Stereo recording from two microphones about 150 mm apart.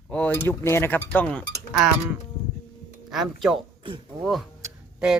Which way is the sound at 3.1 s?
Centre (ahead or behind).